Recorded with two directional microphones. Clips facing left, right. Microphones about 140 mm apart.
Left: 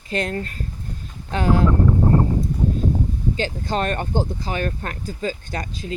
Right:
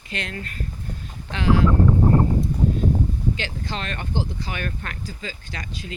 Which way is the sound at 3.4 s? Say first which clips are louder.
Left 7 dB; 45° left (ahead or behind).